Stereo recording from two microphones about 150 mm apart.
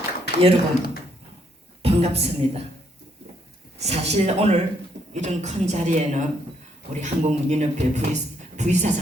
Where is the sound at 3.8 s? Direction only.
45° right (ahead or behind).